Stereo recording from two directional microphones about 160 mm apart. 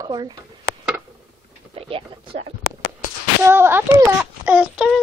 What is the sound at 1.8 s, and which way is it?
Speech, 35° right (ahead or behind).